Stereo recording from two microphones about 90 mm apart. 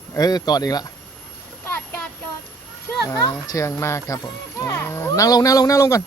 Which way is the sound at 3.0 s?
40° left (ahead or behind).